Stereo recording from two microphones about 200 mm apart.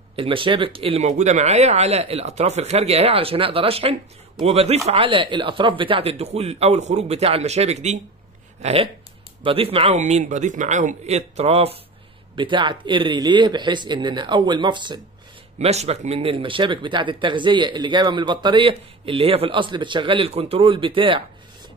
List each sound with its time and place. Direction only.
0.1 s speech: 25° right (ahead or behind)